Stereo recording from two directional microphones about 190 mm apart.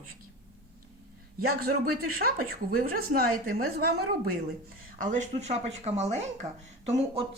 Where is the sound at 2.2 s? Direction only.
50° right (ahead or behind).